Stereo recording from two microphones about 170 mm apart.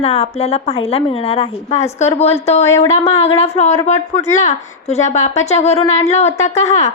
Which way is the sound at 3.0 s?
40° left (ahead or behind).